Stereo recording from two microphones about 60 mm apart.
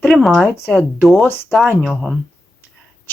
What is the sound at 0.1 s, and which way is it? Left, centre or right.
Speech, centre.